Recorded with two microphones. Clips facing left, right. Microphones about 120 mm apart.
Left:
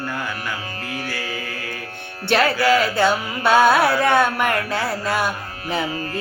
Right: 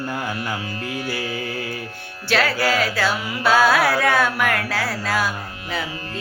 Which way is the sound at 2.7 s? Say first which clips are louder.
Left 4 dB; 25° left (ahead or behind).